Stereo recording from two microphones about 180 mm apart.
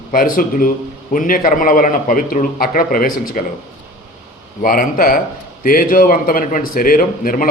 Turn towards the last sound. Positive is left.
turn(degrees=50)  # may be behind; listen again after turning